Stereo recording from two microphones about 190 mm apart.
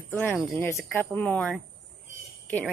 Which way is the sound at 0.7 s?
10° left (ahead or behind).